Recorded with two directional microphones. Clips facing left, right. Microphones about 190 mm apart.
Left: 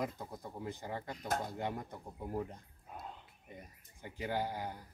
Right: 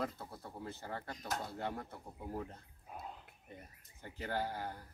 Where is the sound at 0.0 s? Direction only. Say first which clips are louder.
Left 1 dB; 15° left (ahead or behind).